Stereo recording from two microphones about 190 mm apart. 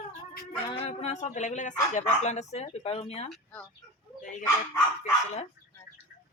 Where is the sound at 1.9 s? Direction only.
35° left (ahead or behind).